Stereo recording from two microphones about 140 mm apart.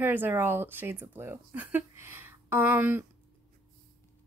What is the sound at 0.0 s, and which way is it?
Speech, 15° right (ahead or behind).